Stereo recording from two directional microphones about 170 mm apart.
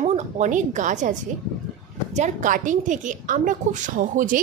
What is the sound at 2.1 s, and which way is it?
A woman's voice, 45° right (ahead or behind).